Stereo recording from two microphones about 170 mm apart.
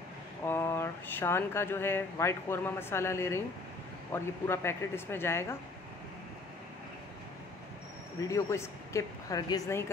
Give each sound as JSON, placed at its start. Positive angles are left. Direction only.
{"t": 0.5, "sound": "speech", "side_deg": 15}
{"t": 8.3, "sound": "speech", "side_deg": 15}